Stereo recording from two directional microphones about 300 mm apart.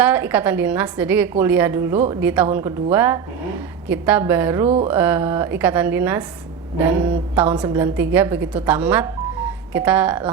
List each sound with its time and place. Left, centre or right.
0.0 s a woman's voice: centre
4.6 s a sound: right
4.9 s a woman's voice: centre
7.4 s a woman's voice: centre